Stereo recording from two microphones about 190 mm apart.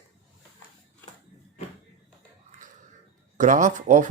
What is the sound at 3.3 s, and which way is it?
Speech, 40° right (ahead or behind).